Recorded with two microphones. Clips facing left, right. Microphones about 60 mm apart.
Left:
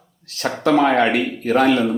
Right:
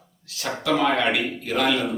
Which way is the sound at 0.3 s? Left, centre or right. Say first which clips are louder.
Left 6 dB; left.